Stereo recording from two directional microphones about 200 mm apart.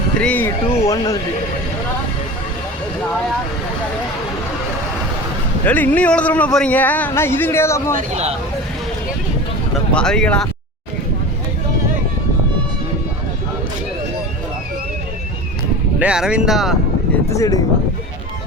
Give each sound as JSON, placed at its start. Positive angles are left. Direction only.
{"t": 0.2, "sound": "speech", "side_deg": 10}
{"t": 5.6, "sound": "speech", "side_deg": 10}
{"t": 7.9, "sound": "speech", "side_deg": -35}
{"t": 9.9, "sound": "speech", "side_deg": 5}
{"t": 16.0, "sound": "speech", "side_deg": -5}
{"t": 17.2, "sound": "speech", "side_deg": 15}